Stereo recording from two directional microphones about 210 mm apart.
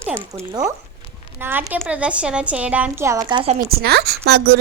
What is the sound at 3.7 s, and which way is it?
Speech, 50° right (ahead or behind).